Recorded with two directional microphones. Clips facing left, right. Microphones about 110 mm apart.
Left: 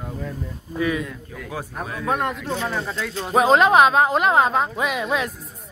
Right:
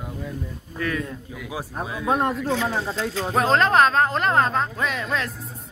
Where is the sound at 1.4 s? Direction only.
10° right (ahead or behind).